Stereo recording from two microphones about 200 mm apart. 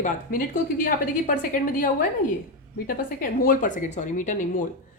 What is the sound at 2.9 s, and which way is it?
A woman's voice, 45° left (ahead or behind).